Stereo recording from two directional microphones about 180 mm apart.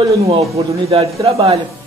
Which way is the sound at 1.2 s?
35° right (ahead or behind).